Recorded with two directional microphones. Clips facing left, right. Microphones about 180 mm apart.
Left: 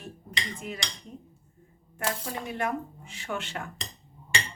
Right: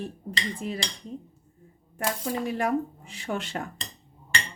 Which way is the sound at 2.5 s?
35° right (ahead or behind).